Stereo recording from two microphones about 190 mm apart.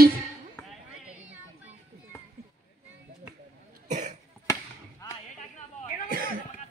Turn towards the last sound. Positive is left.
turn(degrees=-50)  # may be behind; listen again after turning